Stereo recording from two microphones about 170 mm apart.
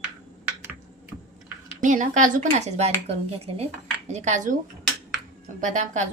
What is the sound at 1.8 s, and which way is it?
A woman's voice, 50° right (ahead or behind).